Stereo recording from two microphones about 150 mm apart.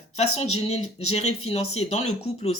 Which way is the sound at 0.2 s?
45° left (ahead or behind).